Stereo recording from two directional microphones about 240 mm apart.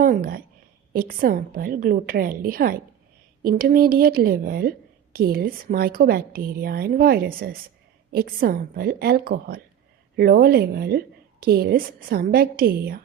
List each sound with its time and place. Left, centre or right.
0.0 s a woman's voice: right